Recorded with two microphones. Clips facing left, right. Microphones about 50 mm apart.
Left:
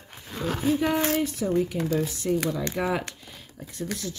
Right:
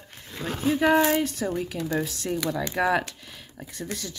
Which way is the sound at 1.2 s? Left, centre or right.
Right.